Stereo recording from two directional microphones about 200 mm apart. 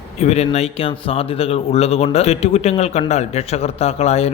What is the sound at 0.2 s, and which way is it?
A man's voice, 30° left (ahead or behind).